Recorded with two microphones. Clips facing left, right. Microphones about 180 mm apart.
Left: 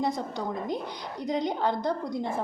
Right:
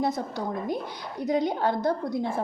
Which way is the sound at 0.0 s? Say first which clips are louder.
Right 2 dB; 15° left (ahead or behind).